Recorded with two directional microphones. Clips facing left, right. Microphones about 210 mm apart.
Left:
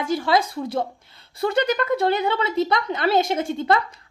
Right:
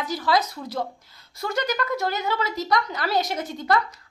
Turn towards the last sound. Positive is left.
turn(degrees=25)  # may be behind; listen again after turning